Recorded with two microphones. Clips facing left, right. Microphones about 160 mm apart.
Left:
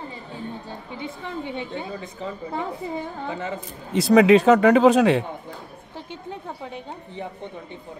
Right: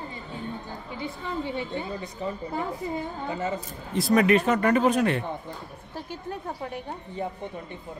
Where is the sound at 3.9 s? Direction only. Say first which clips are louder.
Left 6 dB; 85° left.